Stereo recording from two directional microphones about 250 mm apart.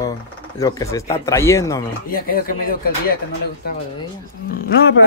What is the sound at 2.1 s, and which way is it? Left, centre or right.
Speech, left.